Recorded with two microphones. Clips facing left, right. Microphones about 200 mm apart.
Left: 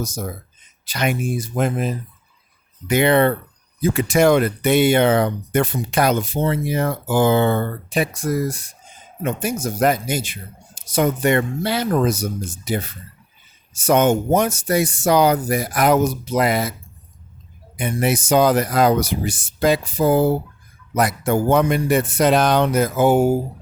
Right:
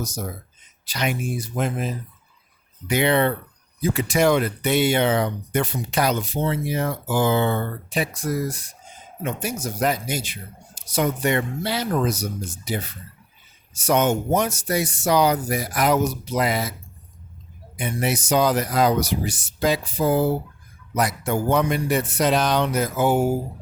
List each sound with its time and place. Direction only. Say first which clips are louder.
0.0 s speech: left 3 dB; 50° left (ahead or behind)
17.7 s speech: left 4 dB; 55° left (ahead or behind)